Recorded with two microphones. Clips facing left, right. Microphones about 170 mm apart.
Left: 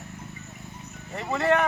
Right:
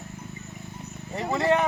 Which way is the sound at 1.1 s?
15° right (ahead or behind).